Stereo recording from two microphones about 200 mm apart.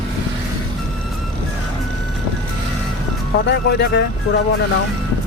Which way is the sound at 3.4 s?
60° left (ahead or behind).